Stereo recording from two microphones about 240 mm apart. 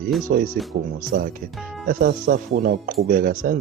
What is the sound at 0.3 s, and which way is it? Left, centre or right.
Speech, right.